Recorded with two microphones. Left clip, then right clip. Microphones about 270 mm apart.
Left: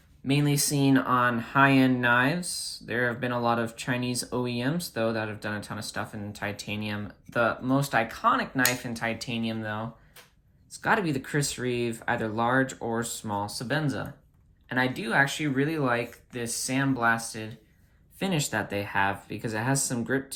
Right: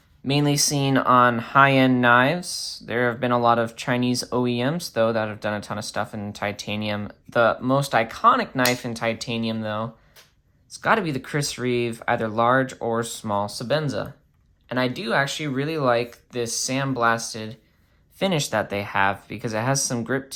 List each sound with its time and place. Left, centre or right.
0.3 s speech: centre